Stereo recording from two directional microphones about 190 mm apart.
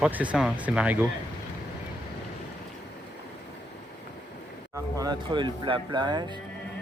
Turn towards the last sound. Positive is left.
turn(degrees=-25)  # may be behind; listen again after turning